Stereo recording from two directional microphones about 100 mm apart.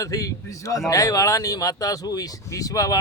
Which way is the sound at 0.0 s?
35° left (ahead or behind).